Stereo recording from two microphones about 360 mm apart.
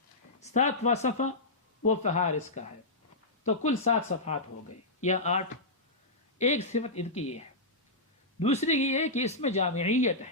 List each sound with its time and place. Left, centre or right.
0.3 s speech: centre
3.4 s speech: centre
8.4 s speech: centre